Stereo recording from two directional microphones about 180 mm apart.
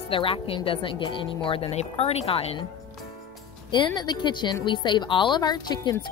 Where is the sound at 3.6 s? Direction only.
25° left (ahead or behind).